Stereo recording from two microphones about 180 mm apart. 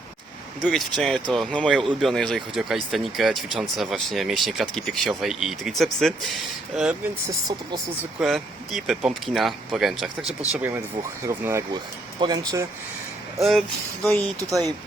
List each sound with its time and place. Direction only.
0.6 s speech: centre (ahead or behind)
8.2 s speech: centre (ahead or behind); by 12.6 s 20° right (ahead or behind)
13.4 s speech: centre (ahead or behind)